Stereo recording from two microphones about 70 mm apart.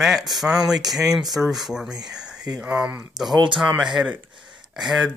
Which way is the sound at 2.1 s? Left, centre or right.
Centre.